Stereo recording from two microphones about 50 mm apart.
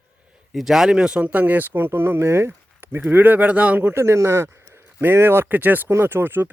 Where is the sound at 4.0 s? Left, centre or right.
Right.